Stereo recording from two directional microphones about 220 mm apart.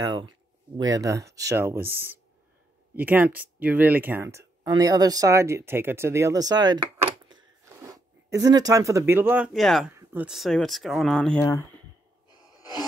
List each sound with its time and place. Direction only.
0.0 s speech: 20° right (ahead or behind); by 11.4 s 5° left (ahead or behind)